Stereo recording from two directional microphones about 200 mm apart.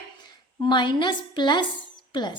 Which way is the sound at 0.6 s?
25° left (ahead or behind).